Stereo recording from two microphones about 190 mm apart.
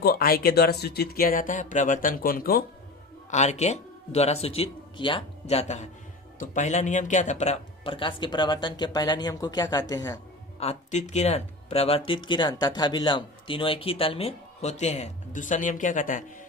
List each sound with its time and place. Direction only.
0.0 s speech: 50° left (ahead or behind)
3.2 s a man's voice: 40° left (ahead or behind); by 10.2 s 20° left (ahead or behind)
10.6 s speech: 35° left (ahead or behind)